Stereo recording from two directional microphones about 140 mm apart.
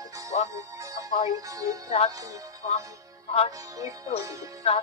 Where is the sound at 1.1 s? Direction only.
55° left (ahead or behind).